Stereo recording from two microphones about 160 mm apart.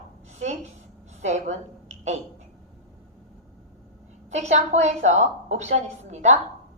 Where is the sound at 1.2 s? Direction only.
45° right (ahead or behind).